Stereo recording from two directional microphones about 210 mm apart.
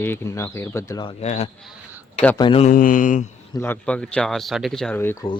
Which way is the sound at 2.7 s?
40° left (ahead or behind).